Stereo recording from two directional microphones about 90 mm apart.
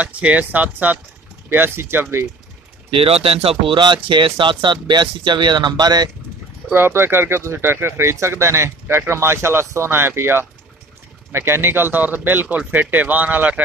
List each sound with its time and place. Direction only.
0.0 s speech: 15° right (ahead or behind)
2.9 s speech: 90° right; by 6.0 s 50° right (ahead or behind)
6.7 s speech: 25° right (ahead or behind)